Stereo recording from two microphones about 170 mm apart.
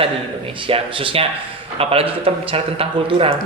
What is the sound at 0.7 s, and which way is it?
A man's voice, 30° right (ahead or behind).